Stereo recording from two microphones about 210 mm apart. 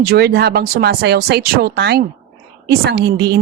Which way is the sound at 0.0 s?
50° right (ahead or behind).